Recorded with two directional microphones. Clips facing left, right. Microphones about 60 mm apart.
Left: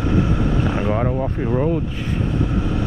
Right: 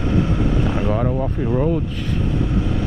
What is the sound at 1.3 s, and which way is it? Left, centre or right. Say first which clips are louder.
Vehicle: even; centre.